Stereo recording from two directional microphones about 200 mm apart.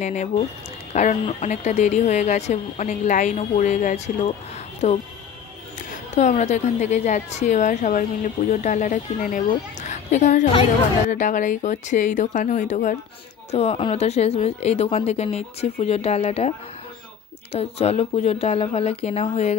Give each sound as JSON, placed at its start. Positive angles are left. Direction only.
{"t": 0.0, "sound": "a woman's voice", "side_deg": 35}
{"t": 6.1, "sound": "a woman's voice", "side_deg": 35}